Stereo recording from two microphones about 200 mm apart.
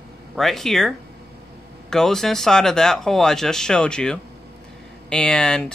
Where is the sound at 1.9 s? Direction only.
Centre (ahead or behind).